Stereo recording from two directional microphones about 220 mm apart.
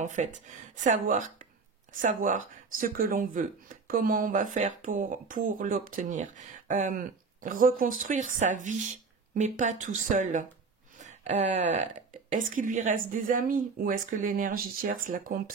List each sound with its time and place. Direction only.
0.0 s speech: 35° right (ahead or behind)